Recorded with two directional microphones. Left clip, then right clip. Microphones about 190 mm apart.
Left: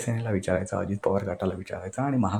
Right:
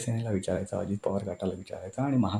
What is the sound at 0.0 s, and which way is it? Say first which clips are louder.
Speech: left 3 dB; 5° left (ahead or behind).